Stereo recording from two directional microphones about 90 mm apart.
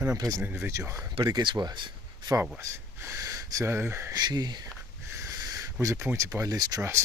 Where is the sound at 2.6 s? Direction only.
30° right (ahead or behind).